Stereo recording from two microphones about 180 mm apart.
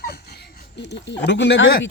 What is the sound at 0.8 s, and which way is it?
Speech, 75° left (ahead or behind).